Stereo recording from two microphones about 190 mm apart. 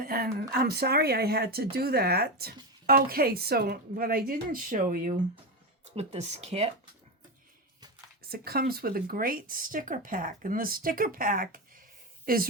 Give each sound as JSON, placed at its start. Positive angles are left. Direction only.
{"t": 0.0, "sound": "a sound", "side_deg": -50}
{"t": 0.5, "sound": "speech", "side_deg": -60}
{"t": 5.9, "sound": "speech", "side_deg": -35}
{"t": 8.2, "sound": "speech", "side_deg": -55}